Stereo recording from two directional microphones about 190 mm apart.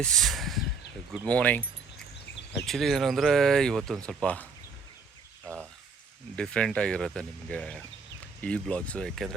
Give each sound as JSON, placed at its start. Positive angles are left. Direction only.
{"t": 0.0, "sound": "speech", "side_deg": 0}
{"t": 2.6, "sound": "speech", "side_deg": 0}
{"t": 6.3, "sound": "speech", "side_deg": 5}